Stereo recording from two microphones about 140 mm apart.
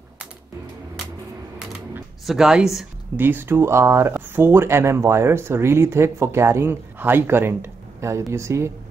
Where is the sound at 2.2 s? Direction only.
5° right (ahead or behind).